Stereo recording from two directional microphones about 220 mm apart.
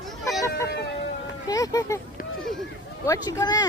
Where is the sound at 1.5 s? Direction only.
15° left (ahead or behind).